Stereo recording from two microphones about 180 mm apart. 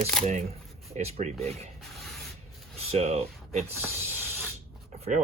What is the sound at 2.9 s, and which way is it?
Speech, 35° right (ahead or behind).